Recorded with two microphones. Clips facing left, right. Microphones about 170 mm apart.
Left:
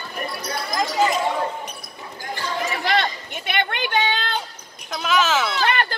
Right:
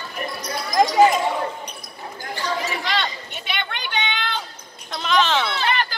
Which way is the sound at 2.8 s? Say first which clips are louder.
Left 4 dB; 50° left (ahead or behind).